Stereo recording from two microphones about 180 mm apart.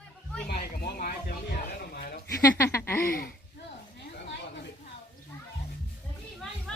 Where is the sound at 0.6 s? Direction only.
60° left (ahead or behind).